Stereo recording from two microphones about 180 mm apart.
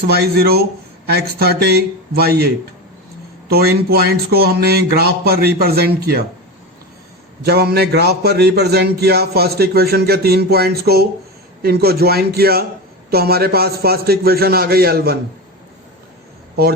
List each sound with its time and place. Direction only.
0.1 s a man's voice: 60° right (ahead or behind)
3.5 s a man's voice: 60° right (ahead or behind)
7.4 s a man's voice: 60° right (ahead or behind)